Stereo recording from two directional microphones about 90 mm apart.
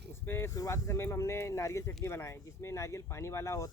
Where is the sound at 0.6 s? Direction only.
30° left (ahead or behind).